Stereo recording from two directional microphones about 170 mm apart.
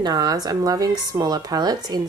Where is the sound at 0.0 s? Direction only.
20° right (ahead or behind).